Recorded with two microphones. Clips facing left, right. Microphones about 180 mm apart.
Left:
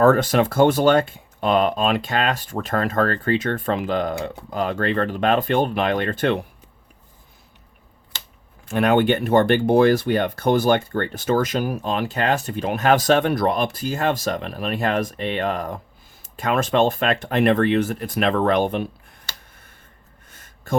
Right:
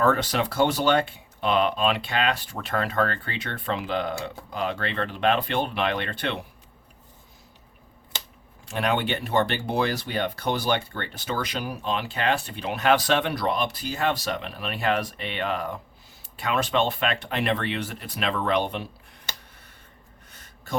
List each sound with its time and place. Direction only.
0.0 s speech: 45° left (ahead or behind)
8.6 s speech: 55° left (ahead or behind)
20.3 s a sound: 50° left (ahead or behind)